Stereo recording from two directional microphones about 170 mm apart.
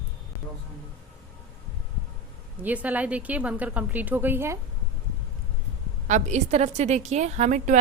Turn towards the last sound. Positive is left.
turn(degrees=-45)  # may be behind; listen again after turning